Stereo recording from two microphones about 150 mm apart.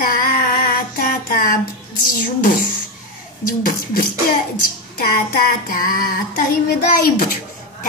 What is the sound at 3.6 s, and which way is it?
Child singing, 75° left (ahead or behind).